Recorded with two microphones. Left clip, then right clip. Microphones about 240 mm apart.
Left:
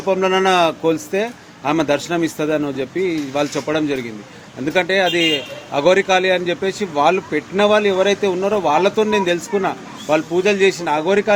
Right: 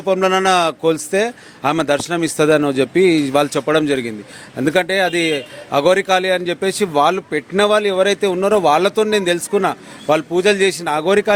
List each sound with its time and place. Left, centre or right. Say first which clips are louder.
0.0 s a man's voice: right 1 dB; right